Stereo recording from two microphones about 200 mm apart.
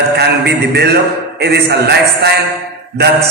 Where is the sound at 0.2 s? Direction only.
55° right (ahead or behind).